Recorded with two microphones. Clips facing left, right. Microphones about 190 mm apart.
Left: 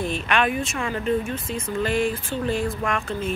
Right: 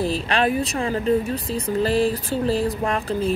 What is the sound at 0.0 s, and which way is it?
Speech, 35° right (ahead or behind).